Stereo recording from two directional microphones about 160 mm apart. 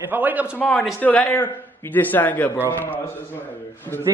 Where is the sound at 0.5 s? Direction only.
5° left (ahead or behind).